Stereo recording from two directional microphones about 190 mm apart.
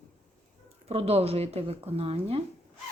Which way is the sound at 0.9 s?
30° right (ahead or behind).